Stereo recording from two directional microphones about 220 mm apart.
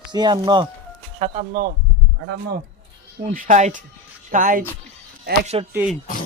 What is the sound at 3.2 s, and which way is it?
Speech, 35° right (ahead or behind).